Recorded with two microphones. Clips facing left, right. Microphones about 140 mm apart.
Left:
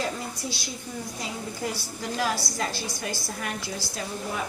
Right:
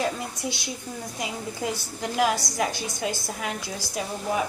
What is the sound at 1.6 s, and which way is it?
A woman's voice, 20° right (ahead or behind).